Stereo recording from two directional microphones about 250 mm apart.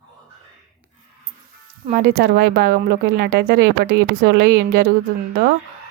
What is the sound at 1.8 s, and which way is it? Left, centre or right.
Speech, right.